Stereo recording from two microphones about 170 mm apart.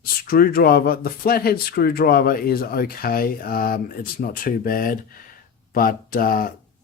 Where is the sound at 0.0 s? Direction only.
60° left (ahead or behind).